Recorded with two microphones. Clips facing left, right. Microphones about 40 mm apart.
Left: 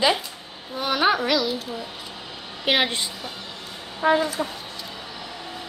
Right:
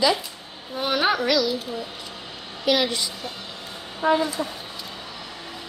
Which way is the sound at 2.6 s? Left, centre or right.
Left.